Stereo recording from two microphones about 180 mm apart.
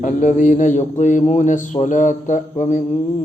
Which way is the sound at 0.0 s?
45° left (ahead or behind).